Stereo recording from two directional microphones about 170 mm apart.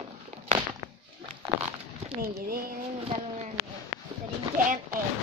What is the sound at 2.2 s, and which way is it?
Speech, 65° right (ahead or behind).